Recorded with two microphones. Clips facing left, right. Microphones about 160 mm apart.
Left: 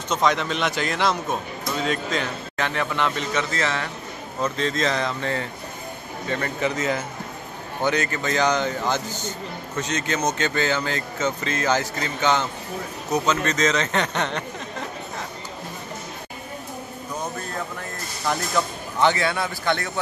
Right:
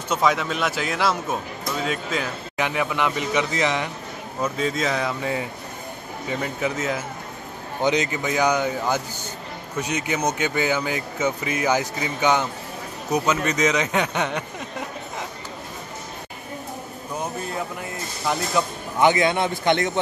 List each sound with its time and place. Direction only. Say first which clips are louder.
0.1 s a man's voice: even; 5° right (ahead or behind)
7.8 s speech: right 2 dB; 15° right (ahead or behind)
18.2 s speech: right 1 dB; 5° right (ahead or behind)